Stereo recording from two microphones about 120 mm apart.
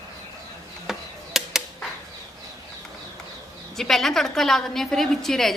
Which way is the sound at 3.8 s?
5° left (ahead or behind).